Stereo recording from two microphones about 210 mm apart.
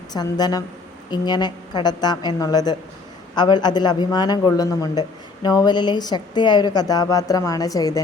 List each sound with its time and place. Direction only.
0.1 s speech: 20° left (ahead or behind)